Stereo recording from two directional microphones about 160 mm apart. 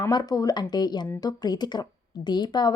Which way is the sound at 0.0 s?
25° left (ahead or behind).